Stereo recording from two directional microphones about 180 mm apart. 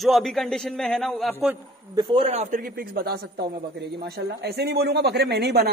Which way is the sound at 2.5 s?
55° right (ahead or behind).